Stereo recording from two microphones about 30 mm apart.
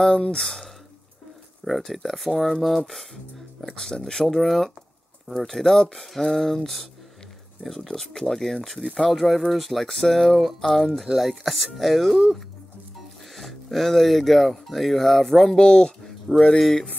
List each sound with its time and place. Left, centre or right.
0.2 s speech: left
1.9 s speech: centre
3.6 s speech: centre
4.4 s speech: centre
8.0 s speech: centre
9.8 s speech: centre
10.1 s speech: centre
13.4 s speech: centre
15.4 s speech: left
16.3 s speech: centre